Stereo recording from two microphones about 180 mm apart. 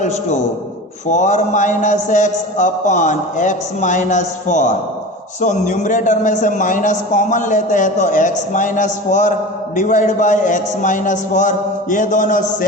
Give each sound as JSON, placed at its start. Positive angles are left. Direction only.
{"t": 1.0, "sound": "a man's voice", "side_deg": 40}